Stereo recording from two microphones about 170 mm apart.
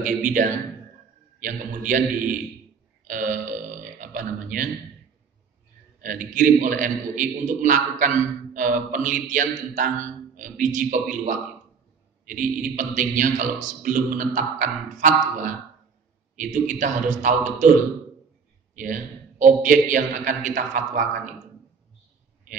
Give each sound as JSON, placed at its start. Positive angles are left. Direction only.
{"t": 0.0, "sound": "a man's voice", "side_deg": -50}
{"t": 6.0, "sound": "a man's voice", "side_deg": -50}
{"t": 18.8, "sound": "a man's voice", "side_deg": -50}